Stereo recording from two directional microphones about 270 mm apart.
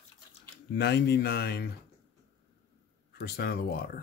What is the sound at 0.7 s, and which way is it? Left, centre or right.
Speech, left.